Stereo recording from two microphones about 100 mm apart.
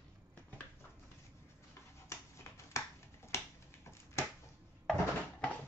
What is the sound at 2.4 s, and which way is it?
Finger snapping, 30° left (ahead or behind).